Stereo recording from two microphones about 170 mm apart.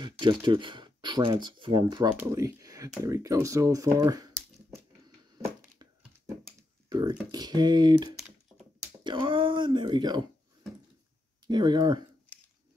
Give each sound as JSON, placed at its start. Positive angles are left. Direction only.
{"t": 0.0, "sound": "speech", "side_deg": -25}
{"t": 5.0, "sound": "a sound", "side_deg": -25}
{"t": 6.9, "sound": "speech", "side_deg": -25}
{"t": 11.4, "sound": "speech", "side_deg": -25}